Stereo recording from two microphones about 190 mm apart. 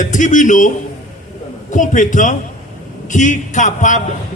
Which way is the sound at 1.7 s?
40° left (ahead or behind).